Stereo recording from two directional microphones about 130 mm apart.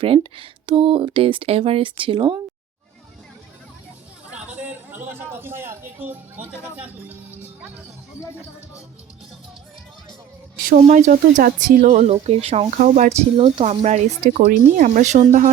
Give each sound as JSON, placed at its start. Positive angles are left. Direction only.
{"t": 0.0, "sound": "speech", "side_deg": -45}
{"t": 4.3, "sound": "a sound", "side_deg": -15}
{"t": 6.7, "sound": "music", "side_deg": -15}
{"t": 10.7, "sound": "speech", "side_deg": -70}
{"t": 11.9, "sound": "speech", "side_deg": -50}
{"t": 12.7, "sound": "speech", "side_deg": -75}
{"t": 13.8, "sound": "speech", "side_deg": -75}